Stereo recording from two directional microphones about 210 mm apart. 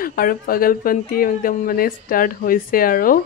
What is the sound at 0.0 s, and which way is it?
Speech, 45° left (ahead or behind).